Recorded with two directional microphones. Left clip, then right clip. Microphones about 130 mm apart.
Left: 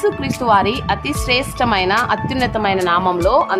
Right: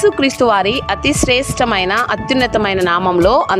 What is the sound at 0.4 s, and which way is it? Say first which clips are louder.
Speech: left 1 dB; 60° right (ahead or behind).